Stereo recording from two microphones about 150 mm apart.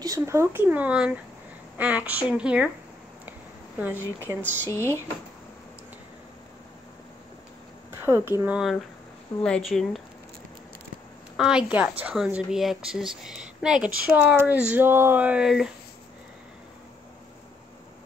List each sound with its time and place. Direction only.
0.0 s speech: 20° right (ahead or behind)
3.8 s speech: 15° right (ahead or behind)
4.6 s speech: 20° left (ahead or behind)
8.0 s a woman's voice: 15° right (ahead or behind)
11.3 s a woman's voice: 5° right (ahead or behind)